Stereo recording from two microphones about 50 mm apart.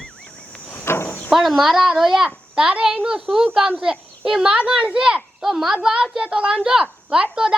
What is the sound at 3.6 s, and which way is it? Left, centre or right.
A child's voice, centre.